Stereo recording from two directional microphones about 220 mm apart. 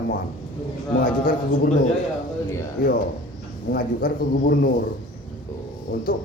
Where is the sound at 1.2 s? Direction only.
40° left (ahead or behind).